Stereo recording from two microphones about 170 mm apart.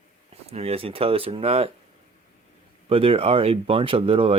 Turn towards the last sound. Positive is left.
turn(degrees=-35)  # may be behind; listen again after turning